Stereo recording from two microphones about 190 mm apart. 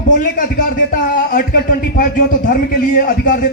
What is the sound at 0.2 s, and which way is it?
Speech, 45° left (ahead or behind).